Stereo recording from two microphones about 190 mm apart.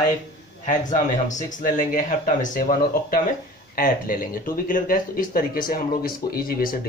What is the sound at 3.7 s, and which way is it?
Speech, 45° left (ahead or behind).